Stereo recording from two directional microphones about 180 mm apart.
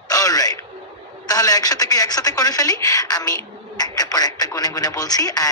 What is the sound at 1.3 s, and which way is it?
Speech, 20° left (ahead or behind).